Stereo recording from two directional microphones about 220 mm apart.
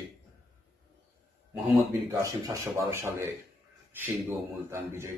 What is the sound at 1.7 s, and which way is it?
Speech, 15° right (ahead or behind).